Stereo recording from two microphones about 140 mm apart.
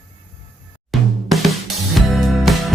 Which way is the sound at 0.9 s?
Centre (ahead or behind).